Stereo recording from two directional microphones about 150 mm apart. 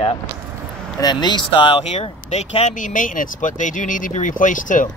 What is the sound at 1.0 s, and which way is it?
Speech, 30° left (ahead or behind).